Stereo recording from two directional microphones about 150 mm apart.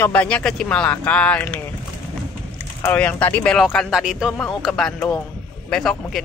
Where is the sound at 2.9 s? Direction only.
10° left (ahead or behind).